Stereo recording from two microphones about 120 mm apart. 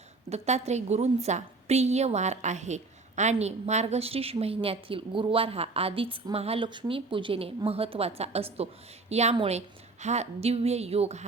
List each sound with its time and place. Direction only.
0.3 s a woman's voice: 65° right (ahead or behind)
6.7 s a woman's voice: 45° right (ahead or behind); by 11.3 s 65° right (ahead or behind)